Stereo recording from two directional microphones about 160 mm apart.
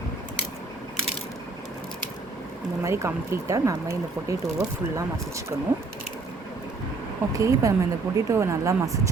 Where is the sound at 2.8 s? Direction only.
20° right (ahead or behind).